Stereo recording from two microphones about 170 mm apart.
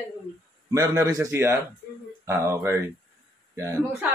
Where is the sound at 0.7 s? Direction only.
20° right (ahead or behind).